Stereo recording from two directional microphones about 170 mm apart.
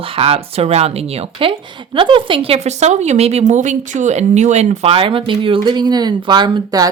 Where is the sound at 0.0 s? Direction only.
35° right (ahead or behind).